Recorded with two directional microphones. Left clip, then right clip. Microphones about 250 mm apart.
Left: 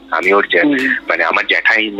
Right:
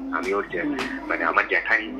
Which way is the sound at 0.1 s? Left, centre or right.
Left.